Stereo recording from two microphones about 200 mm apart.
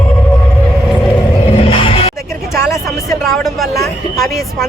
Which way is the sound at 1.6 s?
25° left (ahead or behind).